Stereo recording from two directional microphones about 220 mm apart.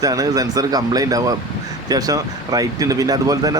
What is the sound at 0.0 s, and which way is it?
Speech, 15° right (ahead or behind).